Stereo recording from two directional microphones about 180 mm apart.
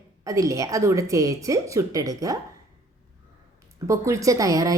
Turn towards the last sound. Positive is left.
turn(degrees=-20)  # may be behind; listen again after turning